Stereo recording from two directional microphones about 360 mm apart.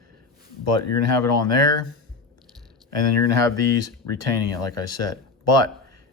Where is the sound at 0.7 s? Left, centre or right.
Left.